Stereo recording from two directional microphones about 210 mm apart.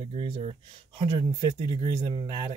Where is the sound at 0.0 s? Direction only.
25° right (ahead or behind).